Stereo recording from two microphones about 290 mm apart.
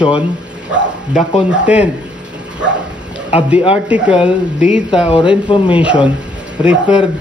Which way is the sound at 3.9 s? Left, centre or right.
Centre.